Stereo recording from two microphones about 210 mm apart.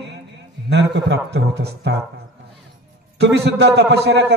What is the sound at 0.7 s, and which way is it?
A man's voice, 55° right (ahead or behind).